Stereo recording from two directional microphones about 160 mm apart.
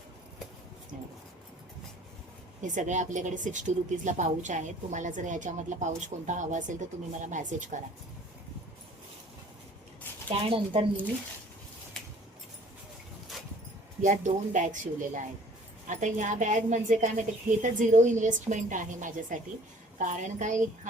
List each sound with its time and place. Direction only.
2.6 s a woman's voice: 50° right (ahead or behind)
10.2 s speech: 35° right (ahead or behind)
14.0 s a woman's voice: 50° right (ahead or behind)